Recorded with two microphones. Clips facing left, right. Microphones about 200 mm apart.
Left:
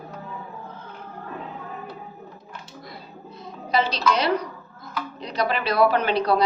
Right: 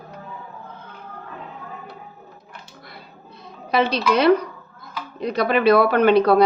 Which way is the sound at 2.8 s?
60° right (ahead or behind).